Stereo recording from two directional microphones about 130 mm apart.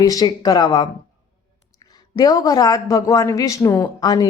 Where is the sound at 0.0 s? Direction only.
30° left (ahead or behind).